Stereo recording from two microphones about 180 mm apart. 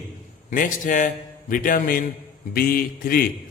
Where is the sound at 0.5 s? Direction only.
50° left (ahead or behind).